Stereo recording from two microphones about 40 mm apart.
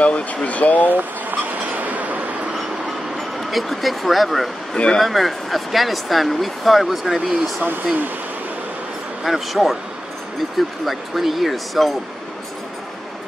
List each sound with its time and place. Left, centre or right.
0.0 s speech: left
1.5 s train: right
3.2 s speech: centre
4.7 s speech: left
5.0 s speech: centre
7.6 s speech: right
9.2 s speech: centre
10.9 s speech: centre